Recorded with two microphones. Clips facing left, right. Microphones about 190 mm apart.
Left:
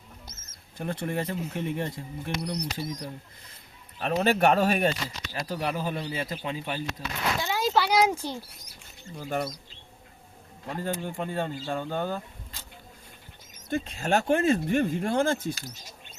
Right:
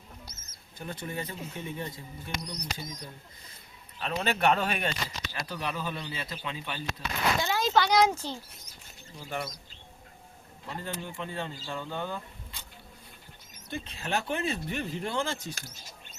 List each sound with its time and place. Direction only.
0.3 s bird: 45° left (ahead or behind)
0.8 s speech: 65° left (ahead or behind)
3.9 s speech: 50° left (ahead or behind)
7.4 s a child's voice: 5° left (ahead or behind)
9.1 s speech: 50° left (ahead or behind)
10.7 s speech: 50° left (ahead or behind)
13.7 s speech: 45° left (ahead or behind)